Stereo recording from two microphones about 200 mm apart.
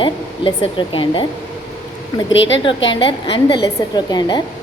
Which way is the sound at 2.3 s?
65° left (ahead or behind).